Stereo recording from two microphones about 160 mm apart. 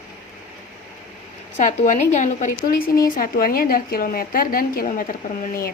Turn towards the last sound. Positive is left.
turn(degrees=65)  # may be behind; listen again after turning